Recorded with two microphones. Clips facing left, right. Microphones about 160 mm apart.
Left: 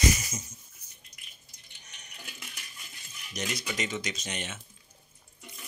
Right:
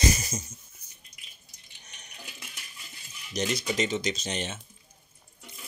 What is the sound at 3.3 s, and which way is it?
Speech, 30° right (ahead or behind).